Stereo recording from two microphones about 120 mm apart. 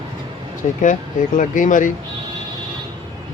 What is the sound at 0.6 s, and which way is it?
Speech, 80° left.